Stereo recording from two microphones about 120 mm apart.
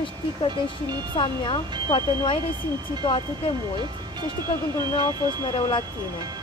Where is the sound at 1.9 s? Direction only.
40° left (ahead or behind).